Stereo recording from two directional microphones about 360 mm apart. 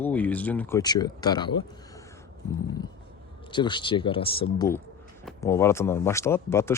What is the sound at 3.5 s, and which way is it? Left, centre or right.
Speech, centre.